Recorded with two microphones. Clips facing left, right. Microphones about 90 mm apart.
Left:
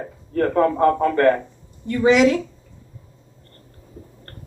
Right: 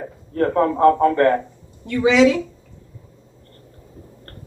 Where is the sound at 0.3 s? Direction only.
25° right (ahead or behind).